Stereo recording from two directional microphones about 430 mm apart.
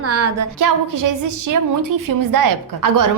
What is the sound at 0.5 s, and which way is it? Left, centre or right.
A woman's voice, right.